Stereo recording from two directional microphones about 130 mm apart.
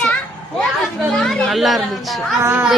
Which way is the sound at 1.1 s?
5° left (ahead or behind).